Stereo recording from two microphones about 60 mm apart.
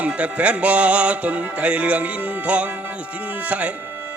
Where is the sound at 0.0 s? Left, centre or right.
Right.